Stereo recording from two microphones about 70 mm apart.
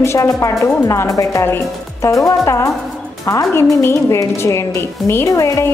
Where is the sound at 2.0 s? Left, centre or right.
Left.